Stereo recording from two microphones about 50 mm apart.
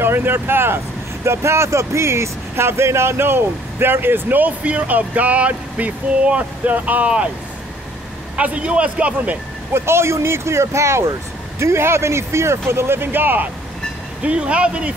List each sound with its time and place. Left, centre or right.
0.0 s speech: right
1.2 s speech: right
8.4 s a man's voice: right
9.8 s speech: right
14.2 s a man's voice: right